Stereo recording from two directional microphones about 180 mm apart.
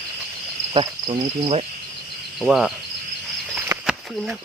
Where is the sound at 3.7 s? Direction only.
Centre (ahead or behind).